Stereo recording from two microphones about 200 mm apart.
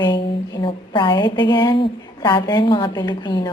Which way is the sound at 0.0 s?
20° left (ahead or behind).